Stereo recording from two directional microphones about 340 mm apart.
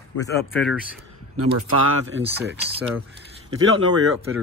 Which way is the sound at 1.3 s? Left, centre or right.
Right.